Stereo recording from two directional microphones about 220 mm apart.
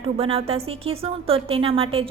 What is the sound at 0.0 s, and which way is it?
A woman's voice, 25° right (ahead or behind).